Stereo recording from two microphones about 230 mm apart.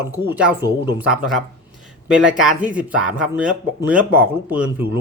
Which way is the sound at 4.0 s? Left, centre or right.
Right.